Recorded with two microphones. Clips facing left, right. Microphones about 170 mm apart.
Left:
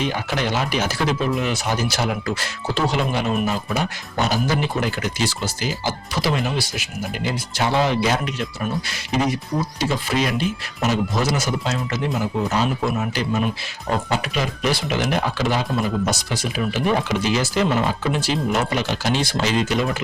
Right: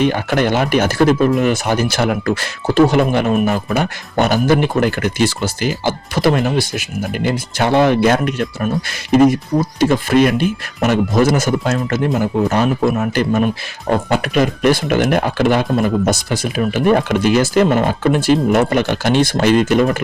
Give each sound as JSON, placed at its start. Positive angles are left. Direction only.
{"t": 0.0, "sound": "speech", "side_deg": -55}